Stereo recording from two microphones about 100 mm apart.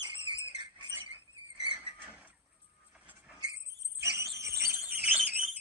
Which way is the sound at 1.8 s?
15° right (ahead or behind).